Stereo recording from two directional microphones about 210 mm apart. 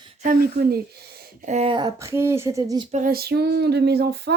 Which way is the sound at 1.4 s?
30° right (ahead or behind).